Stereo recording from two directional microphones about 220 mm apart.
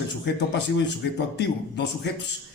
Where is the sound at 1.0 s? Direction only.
55° left (ahead or behind).